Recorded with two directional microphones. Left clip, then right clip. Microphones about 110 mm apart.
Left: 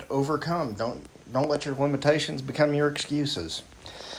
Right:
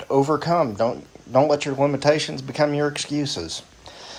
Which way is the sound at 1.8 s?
25° right (ahead or behind).